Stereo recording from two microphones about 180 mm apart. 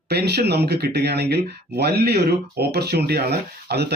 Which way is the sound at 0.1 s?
65° right (ahead or behind).